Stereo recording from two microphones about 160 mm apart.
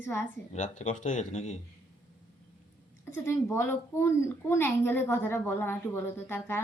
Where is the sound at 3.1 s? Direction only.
15° left (ahead or behind).